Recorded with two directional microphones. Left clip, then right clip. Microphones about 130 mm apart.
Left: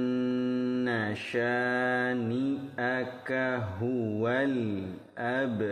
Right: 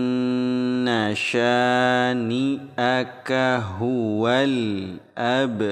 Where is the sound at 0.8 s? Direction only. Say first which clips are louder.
Right 9 dB; 40° right (ahead or behind).